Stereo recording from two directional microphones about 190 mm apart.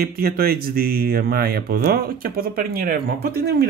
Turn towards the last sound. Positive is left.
turn(degrees=-55)  # may be behind; listen again after turning